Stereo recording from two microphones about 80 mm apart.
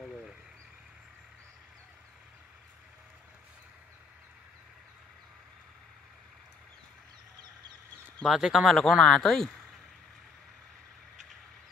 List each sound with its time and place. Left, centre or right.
8.2 s speech: centre